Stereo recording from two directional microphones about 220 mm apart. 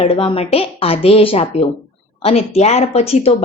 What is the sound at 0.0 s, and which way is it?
Speech, 25° left (ahead or behind).